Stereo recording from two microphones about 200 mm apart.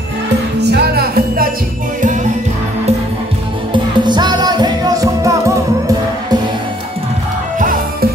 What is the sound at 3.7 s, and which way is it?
Music, 20° right (ahead or behind).